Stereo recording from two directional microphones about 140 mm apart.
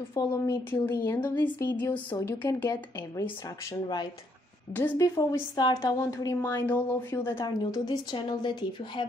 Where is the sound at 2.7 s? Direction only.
30° left (ahead or behind).